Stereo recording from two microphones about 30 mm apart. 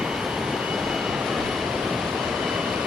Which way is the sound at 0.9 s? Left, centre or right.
Centre.